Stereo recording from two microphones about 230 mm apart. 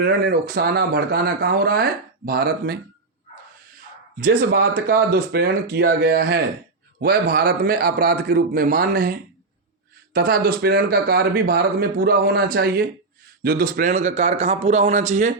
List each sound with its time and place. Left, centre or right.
0.0 s speech: right
4.2 s speech: right